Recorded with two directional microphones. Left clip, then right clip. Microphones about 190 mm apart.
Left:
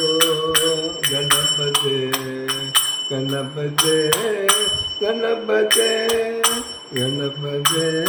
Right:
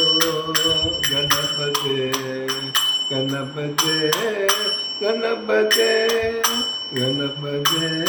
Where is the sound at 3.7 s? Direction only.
50° left (ahead or behind).